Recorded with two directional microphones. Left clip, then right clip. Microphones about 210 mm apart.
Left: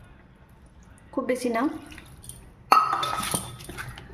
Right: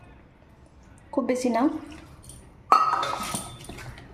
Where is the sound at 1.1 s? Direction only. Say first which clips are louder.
Right 1 dB; 10° left (ahead or behind).